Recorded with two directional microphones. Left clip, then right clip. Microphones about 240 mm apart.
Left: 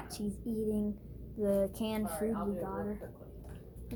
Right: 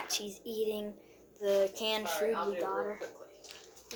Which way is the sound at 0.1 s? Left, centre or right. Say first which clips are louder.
Right 3 dB; centre.